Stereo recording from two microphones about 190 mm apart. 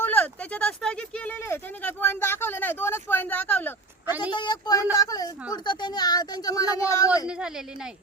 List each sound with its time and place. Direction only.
0.0 s speech: 10° left (ahead or behind)
4.2 s speech: 25° left (ahead or behind)
7.3 s a woman's voice: 5° right (ahead or behind)